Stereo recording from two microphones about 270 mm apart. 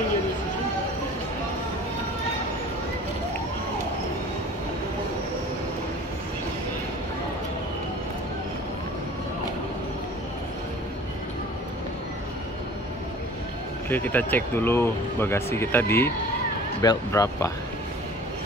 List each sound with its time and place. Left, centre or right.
13.8 s speech: centre